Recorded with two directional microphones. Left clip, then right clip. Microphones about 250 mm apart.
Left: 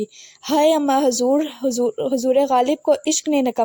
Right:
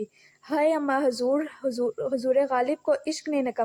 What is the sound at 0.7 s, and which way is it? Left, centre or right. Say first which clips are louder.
Speech: left 7 dB; left.